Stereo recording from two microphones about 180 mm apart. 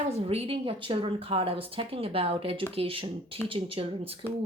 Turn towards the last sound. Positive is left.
turn(degrees=-30)  # may be behind; listen again after turning